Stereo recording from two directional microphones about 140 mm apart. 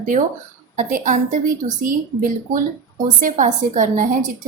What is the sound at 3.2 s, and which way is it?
Speech, 65° right (ahead or behind).